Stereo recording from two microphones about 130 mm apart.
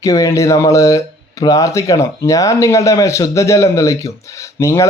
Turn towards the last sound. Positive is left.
turn(degrees=20)  # may be behind; listen again after turning